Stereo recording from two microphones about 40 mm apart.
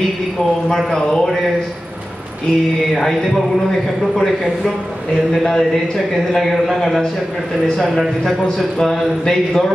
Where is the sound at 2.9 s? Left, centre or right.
Centre.